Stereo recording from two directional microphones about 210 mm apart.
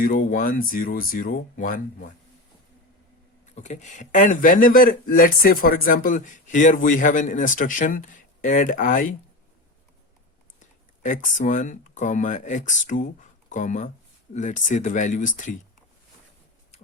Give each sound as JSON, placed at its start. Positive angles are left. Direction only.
{"t": 0.0, "sound": "speech", "side_deg": 40}
{"t": 3.5, "sound": "speech", "side_deg": 35}
{"t": 10.6, "sound": "speech", "side_deg": 40}